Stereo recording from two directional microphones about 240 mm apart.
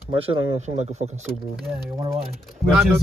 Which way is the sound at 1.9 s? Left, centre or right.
Centre.